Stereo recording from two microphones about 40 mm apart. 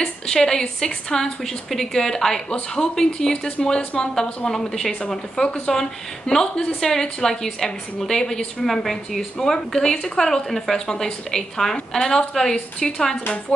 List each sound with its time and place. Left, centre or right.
0.0 s a woman's voice: centre
13.5 s music: left